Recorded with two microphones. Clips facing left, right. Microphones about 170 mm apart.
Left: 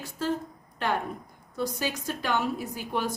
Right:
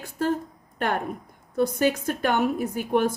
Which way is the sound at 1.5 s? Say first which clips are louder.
Right 8 dB; 55° right (ahead or behind).